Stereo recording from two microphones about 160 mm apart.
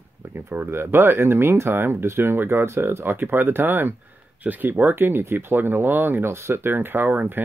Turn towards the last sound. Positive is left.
turn(degrees=-10)  # may be behind; listen again after turning